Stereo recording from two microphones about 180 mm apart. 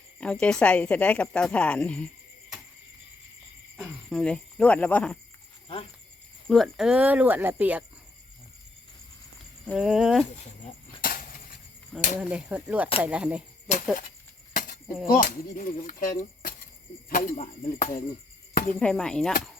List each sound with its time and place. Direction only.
0.2 s a woman's voice: 5° left (ahead or behind)
4.1 s a woman's voice: 5° left (ahead or behind)
6.5 s speech: centre (ahead or behind)
9.6 s speech: 5° right (ahead or behind)
11.0 s a sound: 50° left (ahead or behind)
12.2 s speech: 5° right (ahead or behind)
13.7 s speech: 40° left (ahead or behind)
15.0 s speech: 50° left (ahead or behind)
18.8 s speech: 5° left (ahead or behind)